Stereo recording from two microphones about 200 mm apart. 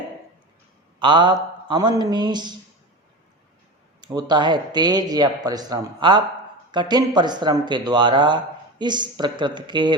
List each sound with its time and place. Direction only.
0.9 s a man's voice: 20° right (ahead or behind)
4.0 s a man's voice: 20° right (ahead or behind)